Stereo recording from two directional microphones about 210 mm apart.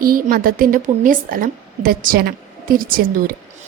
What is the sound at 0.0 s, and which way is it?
A woman's voice, 45° right (ahead or behind).